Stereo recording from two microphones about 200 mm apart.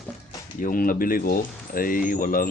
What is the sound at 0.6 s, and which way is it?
Speech, 45° left (ahead or behind).